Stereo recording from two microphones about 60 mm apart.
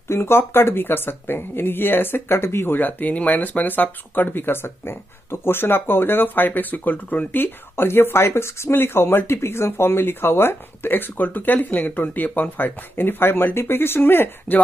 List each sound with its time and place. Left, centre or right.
0.1 s speech: left